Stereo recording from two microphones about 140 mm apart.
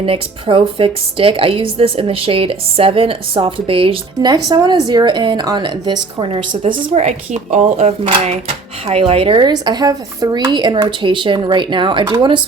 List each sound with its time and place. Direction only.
0.0 s a woman's voice: 40° right (ahead or behind)
6.9 s a woman's voice: 55° right (ahead or behind); by 12.4 s 35° right (ahead or behind)